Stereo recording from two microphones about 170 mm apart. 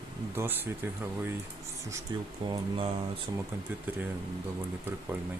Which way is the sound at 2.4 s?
25° right (ahead or behind).